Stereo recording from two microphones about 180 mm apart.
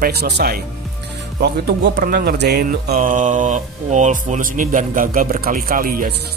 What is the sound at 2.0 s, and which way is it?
Speech, 55° right (ahead or behind).